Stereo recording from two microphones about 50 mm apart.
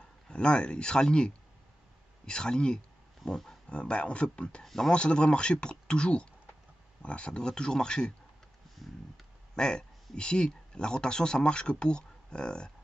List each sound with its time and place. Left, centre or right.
0.3 s speech: left
3.6 s speech: left
9.6 s speech: centre